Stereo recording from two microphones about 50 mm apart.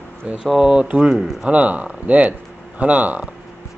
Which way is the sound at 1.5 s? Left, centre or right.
Right.